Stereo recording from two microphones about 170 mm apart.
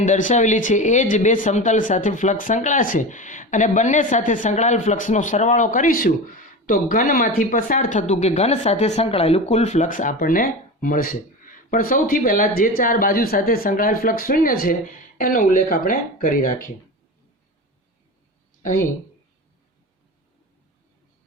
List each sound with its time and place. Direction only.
0.0 s speech: 45° left (ahead or behind)